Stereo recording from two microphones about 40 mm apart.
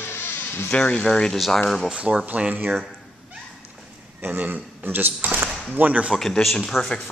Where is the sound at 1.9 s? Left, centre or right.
Right.